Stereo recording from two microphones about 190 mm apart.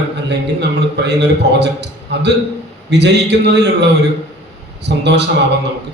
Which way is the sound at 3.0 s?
65° right (ahead or behind).